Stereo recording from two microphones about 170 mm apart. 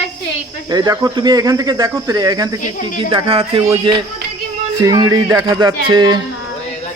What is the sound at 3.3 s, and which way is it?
Speech, 40° right (ahead or behind).